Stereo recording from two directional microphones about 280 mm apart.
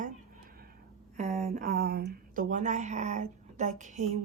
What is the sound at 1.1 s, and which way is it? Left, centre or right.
Speech, right.